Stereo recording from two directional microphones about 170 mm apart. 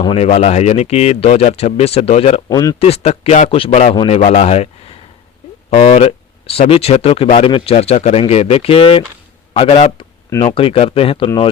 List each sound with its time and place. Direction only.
0.0 s speech: 35° left (ahead or behind)
2.5 s speech: 20° left (ahead or behind)
2.7 s speech: 35° left (ahead or behind)
3.5 s speech: 35° left (ahead or behind)
4.2 s a man's voice: 40° left (ahead or behind)